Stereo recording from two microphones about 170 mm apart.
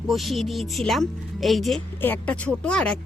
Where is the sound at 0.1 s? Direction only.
Centre (ahead or behind).